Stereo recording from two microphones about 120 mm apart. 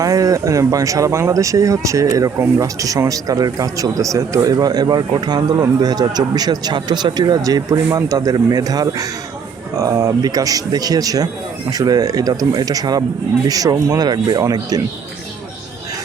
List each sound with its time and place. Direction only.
0.0 s a man's voice: 30° right (ahead or behind)